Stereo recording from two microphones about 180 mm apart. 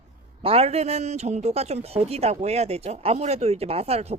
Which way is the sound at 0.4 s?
35° right (ahead or behind).